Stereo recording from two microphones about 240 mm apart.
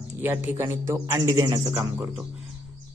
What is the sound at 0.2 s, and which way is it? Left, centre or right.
A man's voice, centre.